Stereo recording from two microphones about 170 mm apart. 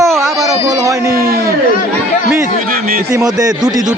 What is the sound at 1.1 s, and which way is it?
Speech, 60° right (ahead or behind).